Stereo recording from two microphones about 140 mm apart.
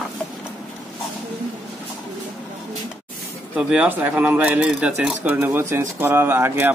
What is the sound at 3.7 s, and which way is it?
Speech, 10° right (ahead or behind).